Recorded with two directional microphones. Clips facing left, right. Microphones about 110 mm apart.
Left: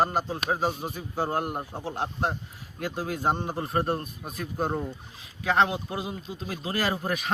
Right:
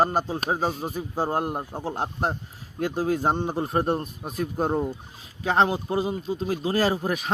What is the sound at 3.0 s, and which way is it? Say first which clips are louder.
A man's voice: right 4 dB; 20° right (ahead or behind).